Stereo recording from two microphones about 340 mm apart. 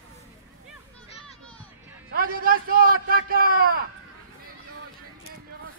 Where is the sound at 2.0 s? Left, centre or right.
Right.